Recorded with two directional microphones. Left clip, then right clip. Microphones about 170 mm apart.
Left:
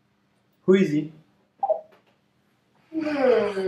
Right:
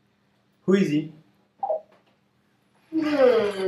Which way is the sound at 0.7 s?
Centre (ahead or behind).